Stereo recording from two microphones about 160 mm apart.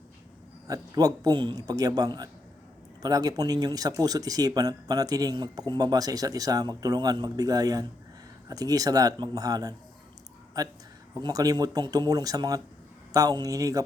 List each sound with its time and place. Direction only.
0.7 s speech: 25° right (ahead or behind)